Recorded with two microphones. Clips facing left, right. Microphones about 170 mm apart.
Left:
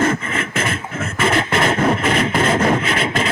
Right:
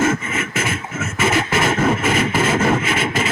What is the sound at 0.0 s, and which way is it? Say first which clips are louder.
Beatboxing: even; 5° right (ahead or behind).